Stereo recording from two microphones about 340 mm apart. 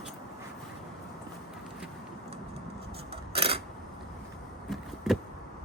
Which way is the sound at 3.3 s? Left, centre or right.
Centre.